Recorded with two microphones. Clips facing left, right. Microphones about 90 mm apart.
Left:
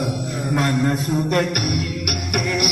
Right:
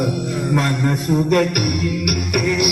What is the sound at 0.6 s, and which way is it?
Music, 35° left (ahead or behind).